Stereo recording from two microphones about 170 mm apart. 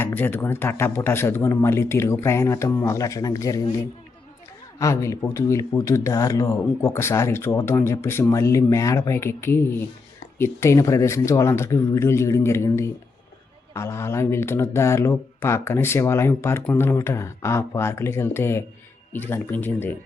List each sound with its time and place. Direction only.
0.0 s speech: 10° left (ahead or behind)
4.8 s speech: 15° left (ahead or behind)